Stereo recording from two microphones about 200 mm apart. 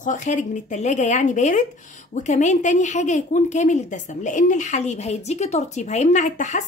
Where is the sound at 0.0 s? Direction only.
40° left (ahead or behind).